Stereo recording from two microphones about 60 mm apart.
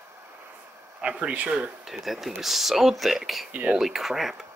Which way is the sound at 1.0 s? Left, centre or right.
Right.